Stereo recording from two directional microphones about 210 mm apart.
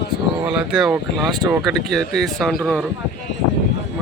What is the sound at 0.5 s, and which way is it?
Speech, 5° right (ahead or behind).